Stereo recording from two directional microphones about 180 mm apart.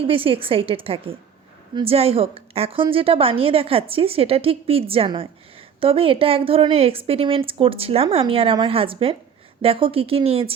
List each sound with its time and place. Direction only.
0.0 s a woman's voice: 30° right (ahead or behind)